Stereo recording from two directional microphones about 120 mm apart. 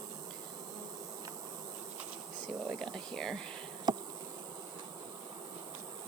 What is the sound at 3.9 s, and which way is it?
Bee, 35° right (ahead or behind).